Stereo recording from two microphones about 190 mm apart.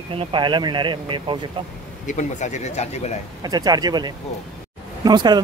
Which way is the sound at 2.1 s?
40° left (ahead or behind).